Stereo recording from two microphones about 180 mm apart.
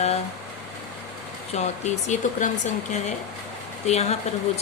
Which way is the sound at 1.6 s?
40° left (ahead or behind).